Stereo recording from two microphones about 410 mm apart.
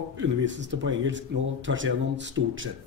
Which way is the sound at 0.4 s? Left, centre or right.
Right.